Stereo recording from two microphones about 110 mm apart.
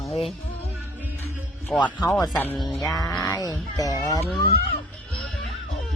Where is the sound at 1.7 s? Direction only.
5° right (ahead or behind).